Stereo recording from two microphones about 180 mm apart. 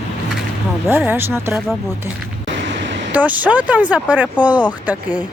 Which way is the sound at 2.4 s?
90° right.